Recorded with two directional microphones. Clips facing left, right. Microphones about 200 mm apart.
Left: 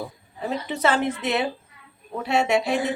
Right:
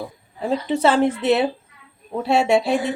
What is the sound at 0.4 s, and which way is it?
Speech, 30° right (ahead or behind).